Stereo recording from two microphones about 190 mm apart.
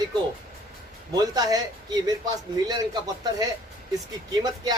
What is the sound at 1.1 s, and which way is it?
A man's voice, 20° right (ahead or behind).